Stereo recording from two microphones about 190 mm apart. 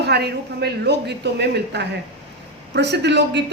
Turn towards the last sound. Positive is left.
turn(degrees=-65)  # may be behind; listen again after turning